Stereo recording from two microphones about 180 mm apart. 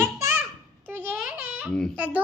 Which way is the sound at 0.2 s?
15° right (ahead or behind).